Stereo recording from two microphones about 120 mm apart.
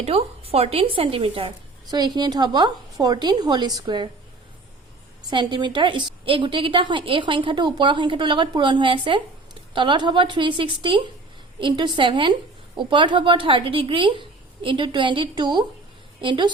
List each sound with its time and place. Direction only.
0.0 s a woman's voice: 55° right (ahead or behind)
1.9 s a woman's voice: 35° right (ahead or behind)
5.3 s a woman's voice: 40° right (ahead or behind)